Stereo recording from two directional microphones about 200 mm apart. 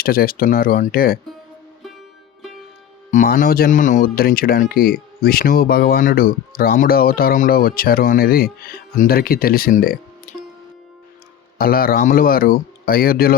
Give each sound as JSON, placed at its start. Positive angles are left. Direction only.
{"t": 0.0, "sound": "speech", "side_deg": 50}
{"t": 3.1, "sound": "speech", "side_deg": 40}
{"t": 11.5, "sound": "speech", "side_deg": 45}